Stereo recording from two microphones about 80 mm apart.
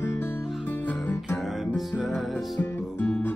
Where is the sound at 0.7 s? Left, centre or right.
Left.